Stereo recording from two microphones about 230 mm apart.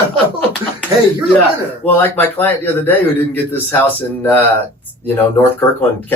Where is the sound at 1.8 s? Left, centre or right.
Centre.